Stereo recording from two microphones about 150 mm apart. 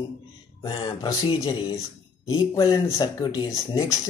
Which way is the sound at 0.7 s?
30° left (ahead or behind).